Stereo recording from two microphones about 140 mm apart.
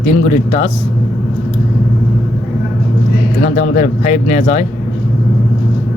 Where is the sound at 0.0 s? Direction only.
55° left (ahead or behind).